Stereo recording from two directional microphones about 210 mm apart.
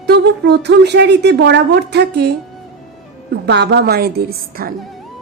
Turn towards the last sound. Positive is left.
turn(degrees=-45)  # may be behind; listen again after turning